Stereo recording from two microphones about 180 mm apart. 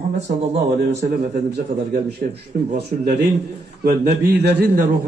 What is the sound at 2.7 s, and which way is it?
Speech, 65° right (ahead or behind).